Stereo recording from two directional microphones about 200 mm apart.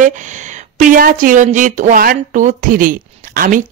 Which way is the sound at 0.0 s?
40° right (ahead or behind).